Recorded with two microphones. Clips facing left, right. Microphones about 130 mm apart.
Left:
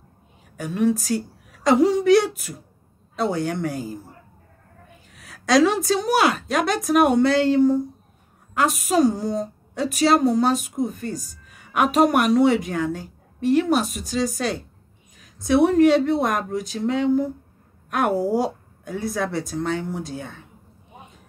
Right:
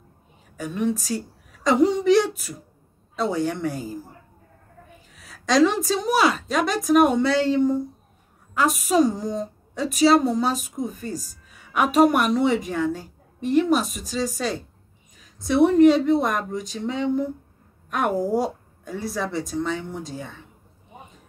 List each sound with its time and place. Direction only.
0.6 s speech: centre (ahead or behind)
5.1 s a woman's voice: centre (ahead or behind)
9.2 s speech: 35° left (ahead or behind)
9.8 s speech: centre (ahead or behind)